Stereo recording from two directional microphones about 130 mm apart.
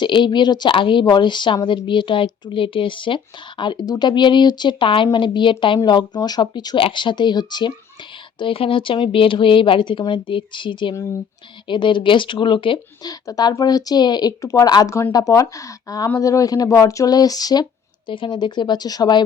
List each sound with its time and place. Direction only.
0.0 s speech: 40° left (ahead or behind)